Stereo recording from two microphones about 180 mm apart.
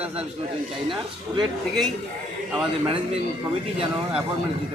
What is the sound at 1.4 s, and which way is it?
Speech, centre (ahead or behind).